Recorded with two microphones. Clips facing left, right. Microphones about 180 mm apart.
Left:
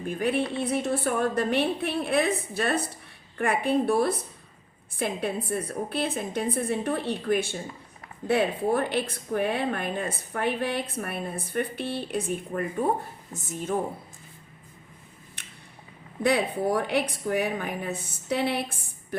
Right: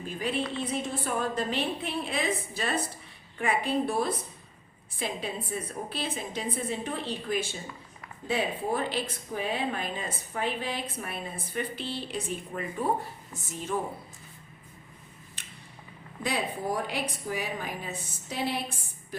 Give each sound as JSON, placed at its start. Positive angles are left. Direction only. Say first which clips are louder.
{"t": 0.0, "sound": "speech", "louder": "left 5 dB", "side_deg": 55}
{"t": 16.2, "sound": "speech", "louder": "left 7 dB", "side_deg": 65}